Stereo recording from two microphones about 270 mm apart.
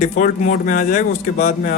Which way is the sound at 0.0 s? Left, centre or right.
Left.